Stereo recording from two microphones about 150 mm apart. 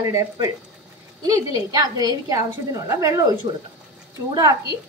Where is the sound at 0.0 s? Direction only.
20° right (ahead or behind).